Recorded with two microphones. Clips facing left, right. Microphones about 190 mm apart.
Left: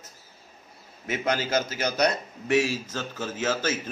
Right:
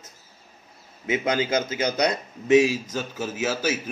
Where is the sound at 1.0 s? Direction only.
15° right (ahead or behind).